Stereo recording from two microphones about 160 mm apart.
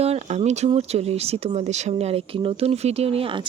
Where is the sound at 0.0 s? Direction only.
40° right (ahead or behind).